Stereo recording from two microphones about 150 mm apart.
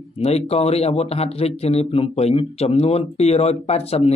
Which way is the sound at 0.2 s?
45° left (ahead or behind).